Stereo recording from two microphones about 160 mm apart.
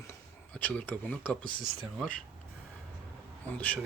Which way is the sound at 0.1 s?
10° left (ahead or behind).